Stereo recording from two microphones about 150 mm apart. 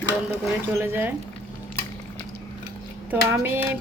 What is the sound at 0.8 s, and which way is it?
Speech, 15° right (ahead or behind).